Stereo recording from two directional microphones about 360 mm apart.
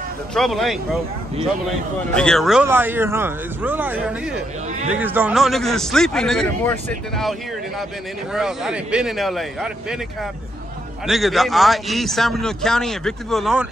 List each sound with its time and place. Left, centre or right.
0.3 s a man's voice: centre
2.1 s a man's voice: centre
11.1 s a man's voice: centre